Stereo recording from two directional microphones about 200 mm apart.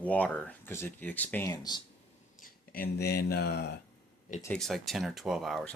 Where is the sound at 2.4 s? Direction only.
50° left (ahead or behind).